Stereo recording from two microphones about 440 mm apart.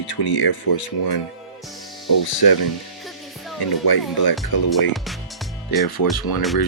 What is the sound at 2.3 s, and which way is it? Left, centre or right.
Speech, left.